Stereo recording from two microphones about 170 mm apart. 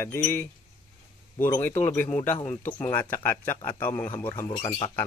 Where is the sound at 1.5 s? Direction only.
15° left (ahead or behind).